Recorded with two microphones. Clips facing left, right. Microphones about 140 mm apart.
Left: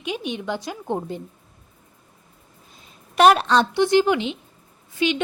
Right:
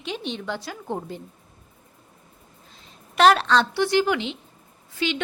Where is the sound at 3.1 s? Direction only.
15° left (ahead or behind).